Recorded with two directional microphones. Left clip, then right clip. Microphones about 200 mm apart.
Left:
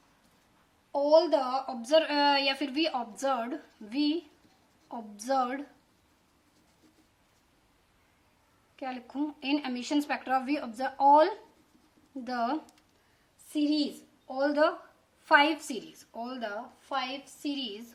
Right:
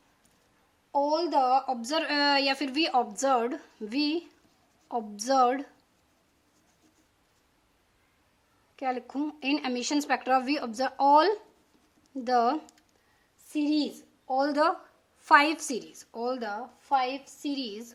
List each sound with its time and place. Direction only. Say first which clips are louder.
1.1 s a woman's voice: left 2 dB; 35° right (ahead or behind)
8.7 s a woman's voice: right 6 dB; 40° right (ahead or behind)